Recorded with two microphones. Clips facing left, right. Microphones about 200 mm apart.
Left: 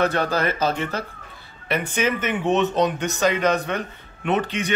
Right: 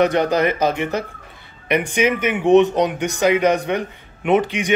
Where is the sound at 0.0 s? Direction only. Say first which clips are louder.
Right 5 dB; 15° right (ahead or behind).